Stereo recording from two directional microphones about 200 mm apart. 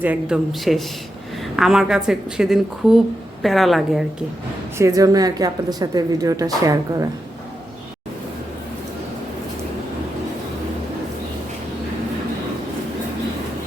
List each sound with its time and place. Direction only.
0.0 s speech: 5° right (ahead or behind)
1.4 s a sound: centre (ahead or behind)
2.0 s speech: centre (ahead or behind)
4.8 s a woman's voice: 15° right (ahead or behind)